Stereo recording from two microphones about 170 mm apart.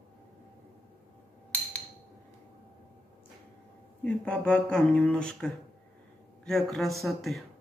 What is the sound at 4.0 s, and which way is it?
Speech, 5° left (ahead or behind).